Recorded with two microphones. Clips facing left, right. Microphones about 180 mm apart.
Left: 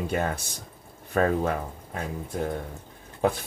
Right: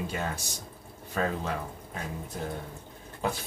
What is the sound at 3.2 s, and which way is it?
Speech, 55° left (ahead or behind).